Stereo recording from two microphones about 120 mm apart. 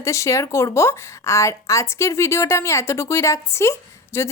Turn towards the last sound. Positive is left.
turn(degrees=20)  # may be behind; listen again after turning